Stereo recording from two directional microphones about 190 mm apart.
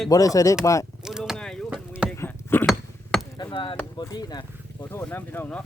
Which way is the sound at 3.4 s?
25° left (ahead or behind).